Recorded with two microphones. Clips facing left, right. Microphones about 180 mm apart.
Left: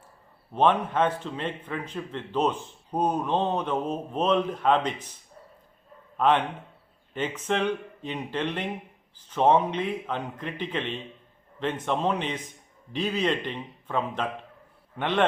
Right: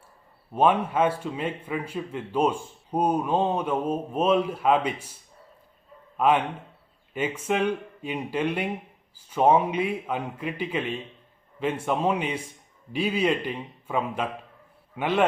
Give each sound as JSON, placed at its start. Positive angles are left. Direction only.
{"t": 0.5, "sound": "a man's voice", "side_deg": -10}
{"t": 6.1, "sound": "a man's voice", "side_deg": -10}